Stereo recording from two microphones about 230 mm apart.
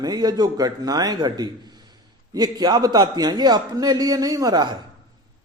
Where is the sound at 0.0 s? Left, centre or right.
Centre.